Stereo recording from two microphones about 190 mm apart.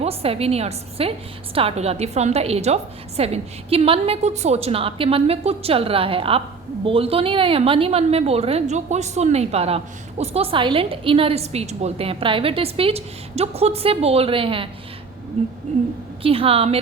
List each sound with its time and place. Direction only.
0.0 s a woman's voice: 30° right (ahead or behind)